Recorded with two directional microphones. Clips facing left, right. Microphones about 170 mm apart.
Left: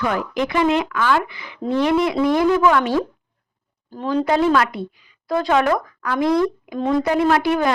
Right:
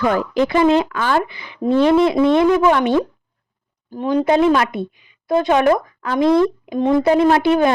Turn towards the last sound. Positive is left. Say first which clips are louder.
# right 4 dB
turn(degrees=-25)  # may be behind; listen again after turning